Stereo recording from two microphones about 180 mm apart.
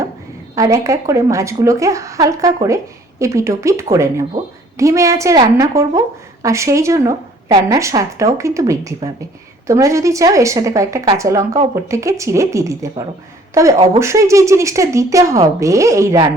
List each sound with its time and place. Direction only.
0.5 s a woman's voice: 20° right (ahead or behind)